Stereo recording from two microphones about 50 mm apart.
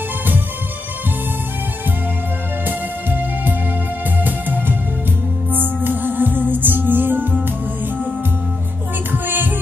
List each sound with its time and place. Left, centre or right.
2.6 s music: right
9.1 s music: right